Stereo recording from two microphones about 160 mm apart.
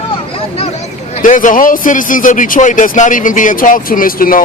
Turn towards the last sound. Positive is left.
turn(degrees=65)  # may be behind; listen again after turning